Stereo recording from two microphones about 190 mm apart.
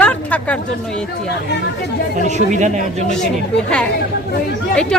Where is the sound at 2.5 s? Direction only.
40° right (ahead or behind).